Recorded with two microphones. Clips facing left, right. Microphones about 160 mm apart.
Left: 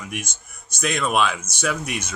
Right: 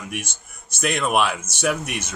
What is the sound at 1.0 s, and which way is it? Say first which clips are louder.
Speech: even; 10° right (ahead or behind).